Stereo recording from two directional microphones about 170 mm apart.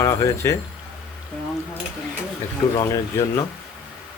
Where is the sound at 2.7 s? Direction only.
20° left (ahead or behind).